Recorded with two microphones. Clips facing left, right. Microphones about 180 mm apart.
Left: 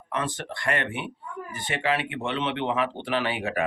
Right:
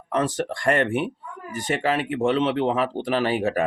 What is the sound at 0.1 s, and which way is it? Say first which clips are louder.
Speech: right 7 dB; 40° right (ahead or behind).